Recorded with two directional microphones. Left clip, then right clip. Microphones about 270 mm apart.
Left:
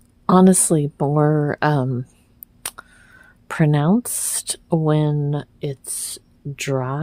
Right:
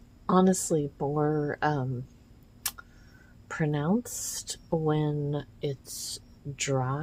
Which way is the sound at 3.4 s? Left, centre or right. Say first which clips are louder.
Left 10 dB; left.